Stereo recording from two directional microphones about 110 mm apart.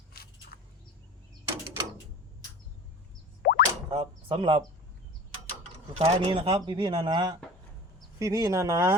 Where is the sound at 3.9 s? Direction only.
60° right (ahead or behind).